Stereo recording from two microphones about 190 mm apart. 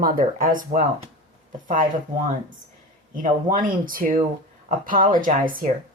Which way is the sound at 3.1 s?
45° right (ahead or behind).